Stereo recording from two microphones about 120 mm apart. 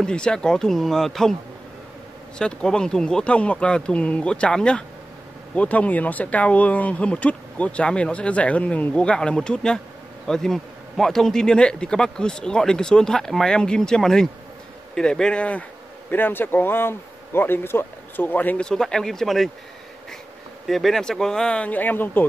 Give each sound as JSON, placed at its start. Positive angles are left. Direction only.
{"t": 0.0, "sound": "speech", "side_deg": 5}
{"t": 2.3, "sound": "speech", "side_deg": 5}
{"t": 20.6, "sound": "speech", "side_deg": 0}